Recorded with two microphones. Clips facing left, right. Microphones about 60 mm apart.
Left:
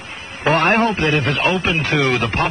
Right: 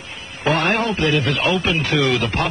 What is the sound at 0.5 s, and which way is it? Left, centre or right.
A man's voice, left.